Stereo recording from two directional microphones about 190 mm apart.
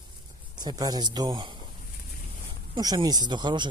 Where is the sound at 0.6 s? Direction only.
20° right (ahead or behind).